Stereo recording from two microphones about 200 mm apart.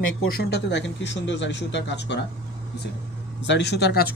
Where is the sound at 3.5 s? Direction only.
60° left (ahead or behind).